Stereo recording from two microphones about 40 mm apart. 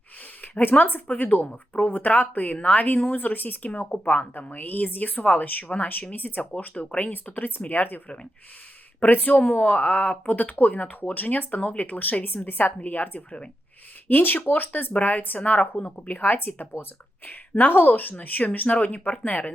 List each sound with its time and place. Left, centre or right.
0.6 s speech: left
2.6 s speech: left
2.8 s speech: left
3.9 s speech: left
4.5 s speech: left
7.1 s speech: left
9.4 s speech: left
14.9 s speech: left